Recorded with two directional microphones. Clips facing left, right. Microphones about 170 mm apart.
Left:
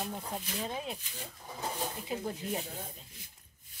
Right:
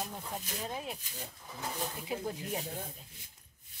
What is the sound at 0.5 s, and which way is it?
Speech, 5° right (ahead or behind).